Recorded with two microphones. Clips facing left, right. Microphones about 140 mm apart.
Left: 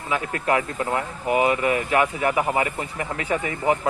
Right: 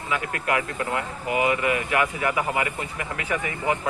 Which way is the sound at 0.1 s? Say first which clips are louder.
Left 3 dB; 30° left (ahead or behind).